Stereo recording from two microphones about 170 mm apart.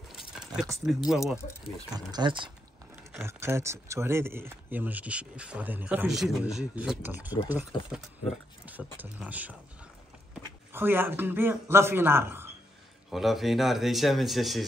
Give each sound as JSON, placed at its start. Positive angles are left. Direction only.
{"t": 0.8, "sound": "speech", "side_deg": -5}
{"t": 2.0, "sound": "speech", "side_deg": -25}
{"t": 3.2, "sound": "speech", "side_deg": -15}
{"t": 8.6, "sound": "a sound", "side_deg": -10}
{"t": 9.3, "sound": "speech", "side_deg": -10}
{"t": 10.7, "sound": "speech", "side_deg": -15}
{"t": 13.1, "sound": "speech", "side_deg": 0}